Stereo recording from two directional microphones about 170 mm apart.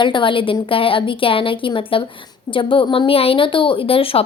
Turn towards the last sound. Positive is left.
turn(degrees=35)  # may be behind; listen again after turning